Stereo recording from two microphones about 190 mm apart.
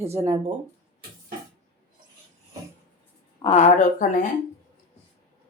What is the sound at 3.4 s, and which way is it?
Speech, 35° left (ahead or behind).